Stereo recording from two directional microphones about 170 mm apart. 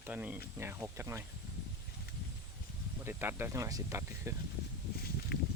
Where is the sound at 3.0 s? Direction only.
15° right (ahead or behind).